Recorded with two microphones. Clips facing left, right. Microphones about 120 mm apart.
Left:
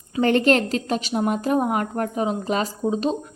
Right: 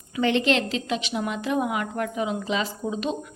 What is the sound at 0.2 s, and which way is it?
A woman's voice, 45° left (ahead or behind).